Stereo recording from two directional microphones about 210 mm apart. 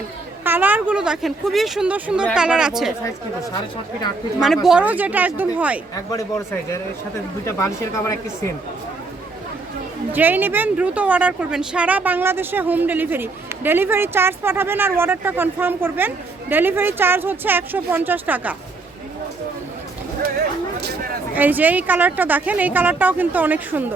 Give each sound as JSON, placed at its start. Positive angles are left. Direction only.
{"t": 0.4, "sound": "a woman's voice", "side_deg": -10}
{"t": 4.4, "sound": "speech", "side_deg": 0}
{"t": 6.1, "sound": "speech", "side_deg": 15}
{"t": 7.4, "sound": "speech", "side_deg": 15}
{"t": 10.1, "sound": "speech", "side_deg": -10}
{"t": 21.3, "sound": "speech", "side_deg": -10}